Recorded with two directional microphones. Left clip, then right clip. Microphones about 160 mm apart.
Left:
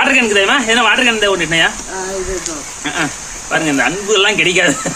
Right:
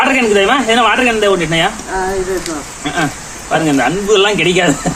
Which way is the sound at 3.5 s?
10° left (ahead or behind).